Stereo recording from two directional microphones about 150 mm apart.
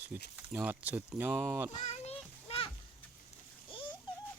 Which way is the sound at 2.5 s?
40° left (ahead or behind).